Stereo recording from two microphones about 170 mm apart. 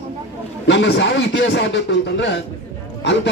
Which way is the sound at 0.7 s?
90° left.